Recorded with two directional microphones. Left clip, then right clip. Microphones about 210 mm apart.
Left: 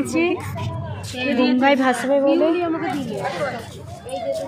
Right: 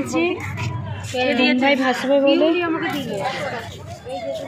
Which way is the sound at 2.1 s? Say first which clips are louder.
Right 3 dB; 10° right (ahead or behind).